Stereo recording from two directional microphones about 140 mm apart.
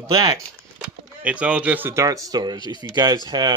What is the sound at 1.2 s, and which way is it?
Speech, 10° right (ahead or behind).